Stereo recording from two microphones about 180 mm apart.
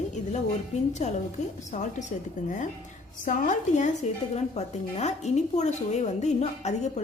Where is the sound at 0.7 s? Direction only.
40° left (ahead or behind).